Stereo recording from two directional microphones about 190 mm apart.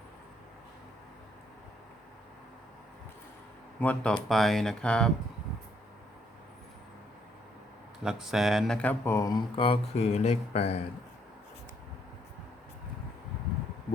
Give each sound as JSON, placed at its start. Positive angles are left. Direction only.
{"t": 3.8, "sound": "speech", "side_deg": 10}
{"t": 8.0, "sound": "speech", "side_deg": 0}